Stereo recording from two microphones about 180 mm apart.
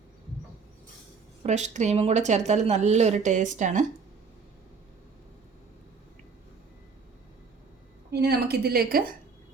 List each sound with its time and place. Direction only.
1.5 s a woman's voice: 40° right (ahead or behind)
8.1 s a woman's voice: 65° right (ahead or behind)